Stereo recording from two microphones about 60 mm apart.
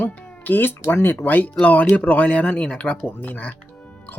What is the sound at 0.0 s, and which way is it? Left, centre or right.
Music, left.